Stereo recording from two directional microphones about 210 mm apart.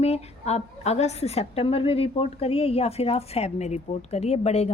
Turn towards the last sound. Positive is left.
turn(degrees=30)  # may be behind; listen again after turning